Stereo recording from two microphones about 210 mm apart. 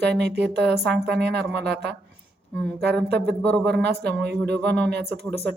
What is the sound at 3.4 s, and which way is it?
Speech, 5° left (ahead or behind).